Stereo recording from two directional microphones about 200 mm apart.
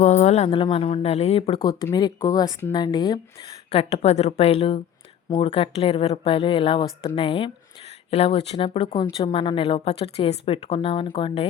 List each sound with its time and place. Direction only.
0.0 s a woman's voice: 35° left (ahead or behind)
1.6 s a woman's voice: 20° left (ahead or behind)